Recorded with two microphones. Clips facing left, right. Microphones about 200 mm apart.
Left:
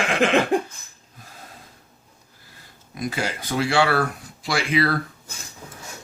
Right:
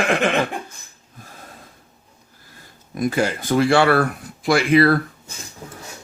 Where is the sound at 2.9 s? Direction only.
50° right (ahead or behind).